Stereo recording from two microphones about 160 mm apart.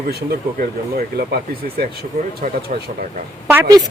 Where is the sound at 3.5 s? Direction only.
20° right (ahead or behind).